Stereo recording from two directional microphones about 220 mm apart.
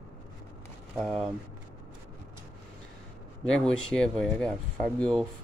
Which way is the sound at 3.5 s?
5° left (ahead or behind).